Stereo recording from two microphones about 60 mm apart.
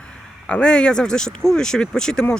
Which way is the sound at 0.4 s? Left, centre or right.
Centre.